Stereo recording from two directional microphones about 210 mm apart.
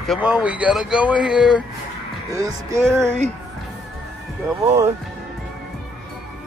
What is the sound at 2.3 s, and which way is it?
Speech, 15° right (ahead or behind).